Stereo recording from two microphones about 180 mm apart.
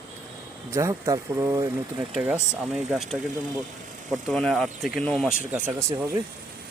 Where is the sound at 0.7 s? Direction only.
15° right (ahead or behind); by 5.3 s centre (ahead or behind).